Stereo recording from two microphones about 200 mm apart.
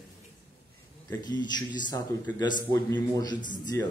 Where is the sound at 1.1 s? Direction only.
20° left (ahead or behind).